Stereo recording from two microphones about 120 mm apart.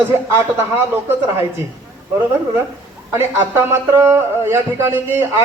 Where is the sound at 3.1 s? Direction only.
20° right (ahead or behind).